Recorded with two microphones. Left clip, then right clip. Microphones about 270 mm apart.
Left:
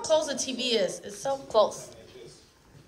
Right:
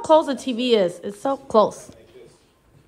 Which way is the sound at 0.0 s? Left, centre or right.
Centre.